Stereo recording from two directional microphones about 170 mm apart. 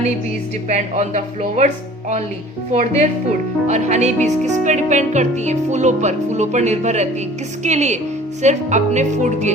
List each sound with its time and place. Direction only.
0.7 s music: 45° right (ahead or behind)